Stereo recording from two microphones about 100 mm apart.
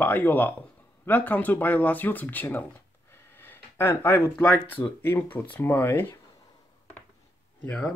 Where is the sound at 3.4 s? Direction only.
25° left (ahead or behind).